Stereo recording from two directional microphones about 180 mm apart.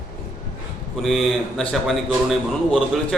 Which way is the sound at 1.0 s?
Centre (ahead or behind).